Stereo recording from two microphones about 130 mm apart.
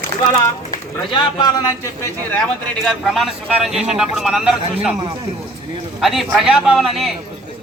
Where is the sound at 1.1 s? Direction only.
35° left (ahead or behind).